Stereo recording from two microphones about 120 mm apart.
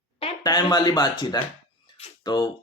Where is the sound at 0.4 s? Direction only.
35° left (ahead or behind).